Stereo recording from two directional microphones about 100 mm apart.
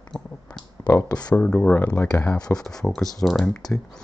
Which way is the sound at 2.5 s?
5° left (ahead or behind).